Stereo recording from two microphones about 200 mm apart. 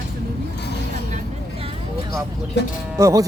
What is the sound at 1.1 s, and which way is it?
Vehicle, 30° right (ahead or behind).